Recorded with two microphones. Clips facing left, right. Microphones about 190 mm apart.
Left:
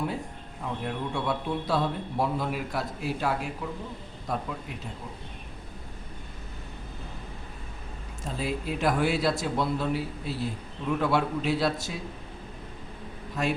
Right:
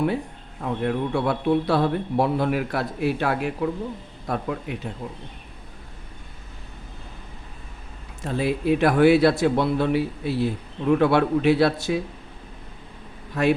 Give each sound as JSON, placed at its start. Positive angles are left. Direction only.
{"t": 0.6, "sound": "a man's voice", "side_deg": -65}
{"t": 8.2, "sound": "a man's voice", "side_deg": -65}
{"t": 13.4, "sound": "a man's voice", "side_deg": -65}